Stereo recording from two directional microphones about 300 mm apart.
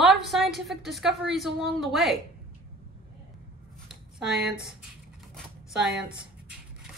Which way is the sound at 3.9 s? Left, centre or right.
Centre.